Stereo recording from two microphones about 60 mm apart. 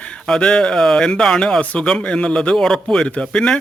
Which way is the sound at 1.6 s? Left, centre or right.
Left.